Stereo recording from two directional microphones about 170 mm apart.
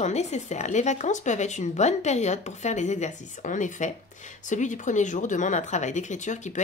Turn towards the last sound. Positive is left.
turn(degrees=45)  # may be behind; listen again after turning